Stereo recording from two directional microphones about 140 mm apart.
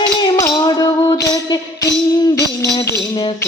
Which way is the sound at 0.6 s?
30° left (ahead or behind).